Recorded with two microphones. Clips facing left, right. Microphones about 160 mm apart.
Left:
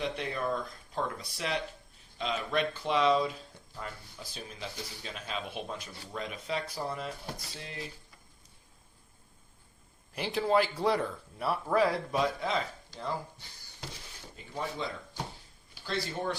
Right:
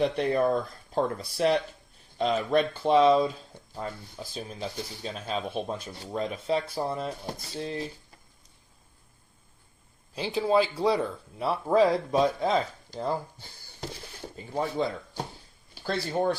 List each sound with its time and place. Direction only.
0.0 s speech: 45° right (ahead or behind)
10.2 s speech: 10° right (ahead or behind)
11.3 s speech: 20° right (ahead or behind)
14.3 s speech: 35° right (ahead or behind)